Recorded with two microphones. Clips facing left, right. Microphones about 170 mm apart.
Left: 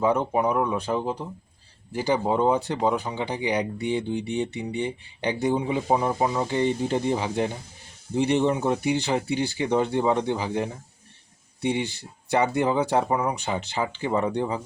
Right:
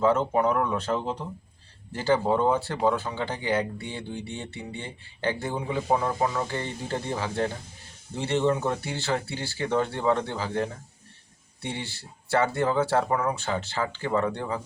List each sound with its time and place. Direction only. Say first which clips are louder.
0.0 s speech: even; 15° left (ahead or behind)